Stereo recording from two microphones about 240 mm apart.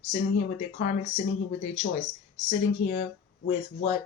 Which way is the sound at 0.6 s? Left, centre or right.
Left.